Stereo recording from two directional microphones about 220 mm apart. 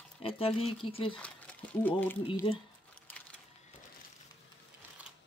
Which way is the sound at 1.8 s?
5° left (ahead or behind).